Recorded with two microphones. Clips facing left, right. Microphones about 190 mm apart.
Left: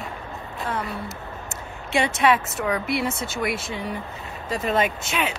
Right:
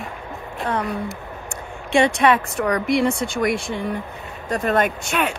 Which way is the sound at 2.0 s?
60° right (ahead or behind).